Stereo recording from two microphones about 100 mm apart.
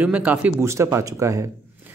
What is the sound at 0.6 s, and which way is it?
Speech, 30° right (ahead or behind).